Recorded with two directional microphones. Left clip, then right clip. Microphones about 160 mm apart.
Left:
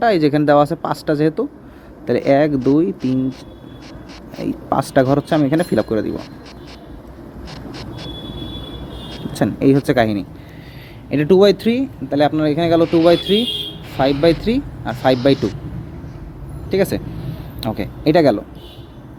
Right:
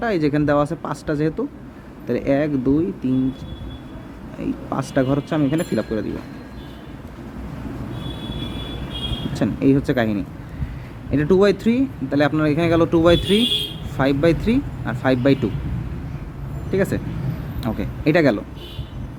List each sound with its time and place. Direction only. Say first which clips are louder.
0.0 s speech: left 6 dB; 15° left (ahead or behind)
4.4 s speech: left 7 dB; 20° left (ahead or behind)
9.3 s speech: left 4 dB; 20° left (ahead or behind)
16.7 s speech: left 4 dB; 15° left (ahead or behind)